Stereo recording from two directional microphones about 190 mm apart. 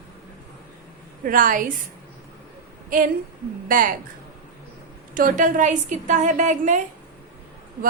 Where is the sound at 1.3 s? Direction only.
45° right (ahead or behind).